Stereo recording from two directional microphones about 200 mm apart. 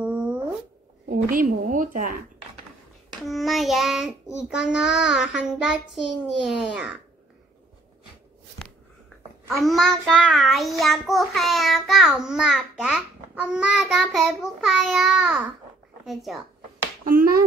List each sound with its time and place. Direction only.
0.0 s a sound: 5° right (ahead or behind)
1.0 s a woman's voice: 45° right (ahead or behind)
3.2 s child singing: centre (ahead or behind)
9.5 s child singing: centre (ahead or behind)
17.0 s speech: 45° right (ahead or behind)